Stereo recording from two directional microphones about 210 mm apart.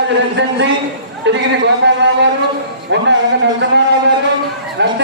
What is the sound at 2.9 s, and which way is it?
Speech, 60° right (ahead or behind).